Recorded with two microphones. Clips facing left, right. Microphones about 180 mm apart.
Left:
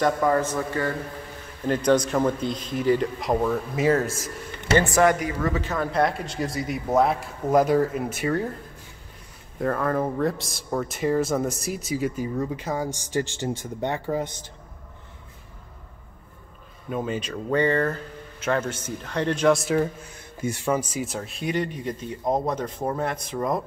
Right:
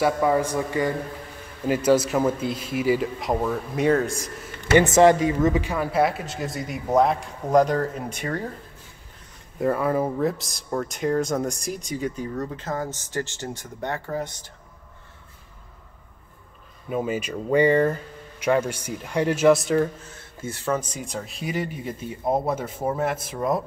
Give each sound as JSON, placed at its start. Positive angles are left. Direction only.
{"t": 0.0, "sound": "speech", "side_deg": -10}
{"t": 4.7, "sound": "speech", "side_deg": -20}
{"t": 9.6, "sound": "speech", "side_deg": -5}
{"t": 16.9, "sound": "speech", "side_deg": -5}